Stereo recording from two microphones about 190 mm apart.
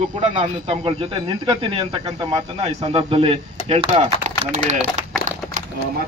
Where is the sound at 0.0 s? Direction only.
35° right (ahead or behind).